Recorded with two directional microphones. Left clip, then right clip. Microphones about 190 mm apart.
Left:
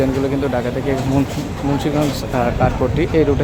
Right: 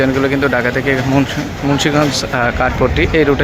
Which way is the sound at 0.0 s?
Centre (ahead or behind).